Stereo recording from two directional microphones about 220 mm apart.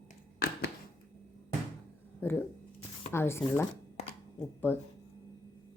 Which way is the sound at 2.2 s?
10° left (ahead or behind).